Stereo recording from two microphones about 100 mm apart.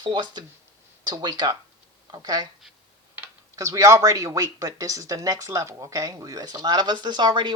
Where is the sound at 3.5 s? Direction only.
35° right (ahead or behind).